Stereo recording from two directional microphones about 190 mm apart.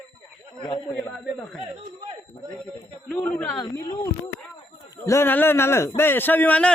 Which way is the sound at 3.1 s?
5° left (ahead or behind).